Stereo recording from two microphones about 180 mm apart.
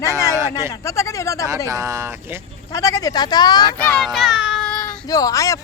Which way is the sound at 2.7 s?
20° left (ahead or behind).